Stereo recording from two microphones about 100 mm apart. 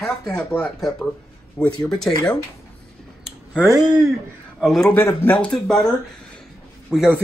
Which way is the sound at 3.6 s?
40° right (ahead or behind).